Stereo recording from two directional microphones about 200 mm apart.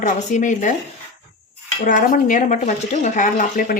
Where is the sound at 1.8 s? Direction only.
40° left (ahead or behind).